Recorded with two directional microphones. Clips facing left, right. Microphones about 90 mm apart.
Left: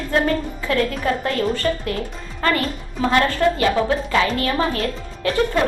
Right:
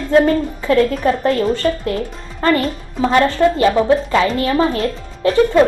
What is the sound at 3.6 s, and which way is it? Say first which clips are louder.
A woman's voice: right 5 dB; 30° right (ahead or behind).